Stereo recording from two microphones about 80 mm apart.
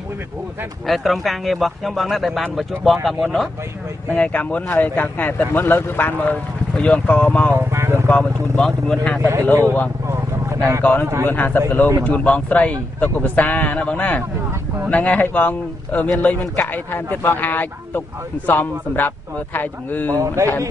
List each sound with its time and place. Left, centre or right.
0.8 s speech: centre
4.1 s a man's voice: centre
7.5 s speech: right
8.1 s speech: centre
9.2 s speech: right
10.0 s a sound: right
10.8 s a man's voice: left
20.1 s speech: right